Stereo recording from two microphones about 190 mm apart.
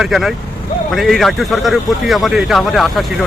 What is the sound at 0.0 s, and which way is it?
Speech, centre (ahead or behind).